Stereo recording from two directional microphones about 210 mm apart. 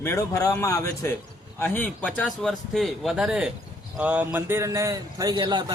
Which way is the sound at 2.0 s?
Centre (ahead or behind).